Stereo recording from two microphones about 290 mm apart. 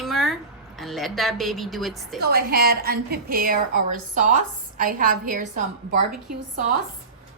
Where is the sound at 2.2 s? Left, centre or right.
Right.